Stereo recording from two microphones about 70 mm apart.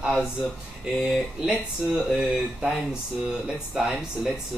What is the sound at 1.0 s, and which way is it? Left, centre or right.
A man's voice, centre.